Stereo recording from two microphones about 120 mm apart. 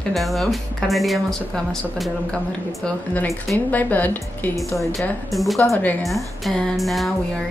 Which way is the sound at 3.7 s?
15° left (ahead or behind).